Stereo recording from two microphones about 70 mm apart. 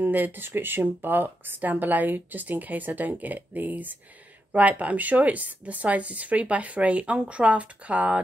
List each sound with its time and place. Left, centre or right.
0.0 s speech: right